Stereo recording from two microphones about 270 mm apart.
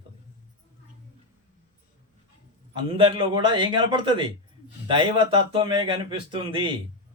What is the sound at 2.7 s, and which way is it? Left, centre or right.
Speech, centre.